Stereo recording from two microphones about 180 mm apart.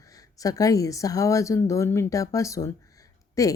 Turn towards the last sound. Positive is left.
turn(degrees=20)  # may be behind; listen again after turning